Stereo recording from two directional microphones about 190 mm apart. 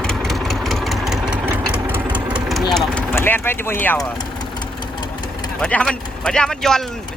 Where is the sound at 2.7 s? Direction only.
10° left (ahead or behind).